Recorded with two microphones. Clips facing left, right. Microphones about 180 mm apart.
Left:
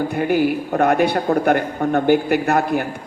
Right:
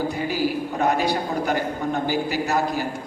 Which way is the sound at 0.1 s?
60° left (ahead or behind).